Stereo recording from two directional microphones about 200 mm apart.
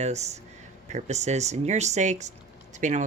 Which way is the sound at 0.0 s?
35° right (ahead or behind).